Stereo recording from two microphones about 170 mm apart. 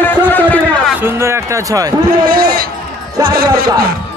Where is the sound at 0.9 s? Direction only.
15° right (ahead or behind).